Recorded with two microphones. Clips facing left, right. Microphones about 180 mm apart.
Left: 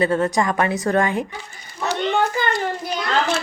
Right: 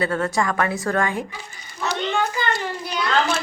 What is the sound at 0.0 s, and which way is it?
A woman's voice, 20° left (ahead or behind).